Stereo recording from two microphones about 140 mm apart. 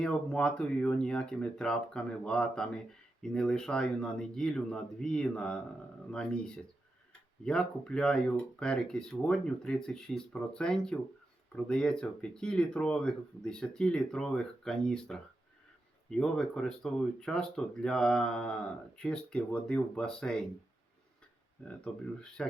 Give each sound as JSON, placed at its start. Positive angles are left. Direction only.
{"t": 0.0, "sound": "speech", "side_deg": 5}
{"t": 21.6, "sound": "speech", "side_deg": 5}